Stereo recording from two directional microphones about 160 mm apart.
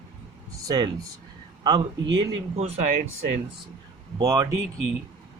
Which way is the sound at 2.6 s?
40° right (ahead or behind).